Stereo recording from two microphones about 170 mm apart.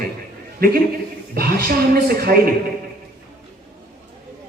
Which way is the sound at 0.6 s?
65° right (ahead or behind).